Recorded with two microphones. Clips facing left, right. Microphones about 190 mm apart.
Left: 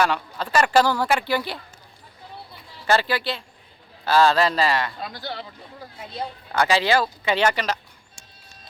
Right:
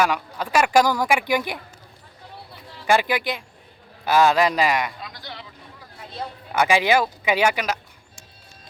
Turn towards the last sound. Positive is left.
turn(degrees=-10)  # may be behind; listen again after turning